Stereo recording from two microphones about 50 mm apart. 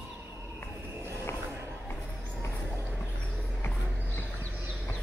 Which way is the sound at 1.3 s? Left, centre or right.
Left.